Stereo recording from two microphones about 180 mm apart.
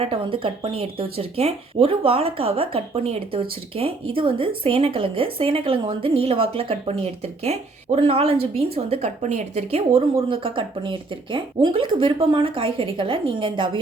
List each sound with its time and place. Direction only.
0.0 s speech: 30° right (ahead or behind)